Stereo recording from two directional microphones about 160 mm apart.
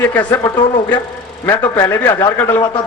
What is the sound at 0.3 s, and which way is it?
A man's voice, 20° left (ahead or behind).